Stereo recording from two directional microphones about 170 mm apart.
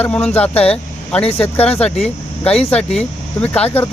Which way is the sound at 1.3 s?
35° left (ahead or behind).